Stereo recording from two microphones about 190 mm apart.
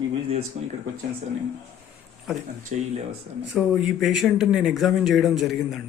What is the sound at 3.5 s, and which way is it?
Speech, centre (ahead or behind).